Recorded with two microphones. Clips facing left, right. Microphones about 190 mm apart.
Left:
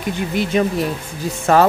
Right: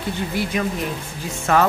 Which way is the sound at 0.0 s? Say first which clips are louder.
Left 3 dB; 20° left (ahead or behind).